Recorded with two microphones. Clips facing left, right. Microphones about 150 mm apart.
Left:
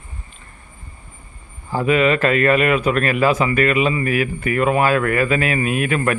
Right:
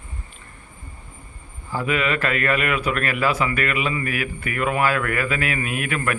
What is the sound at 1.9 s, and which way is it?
Speech, 30° left (ahead or behind).